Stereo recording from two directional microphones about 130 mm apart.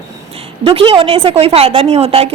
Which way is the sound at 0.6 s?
45° right (ahead or behind).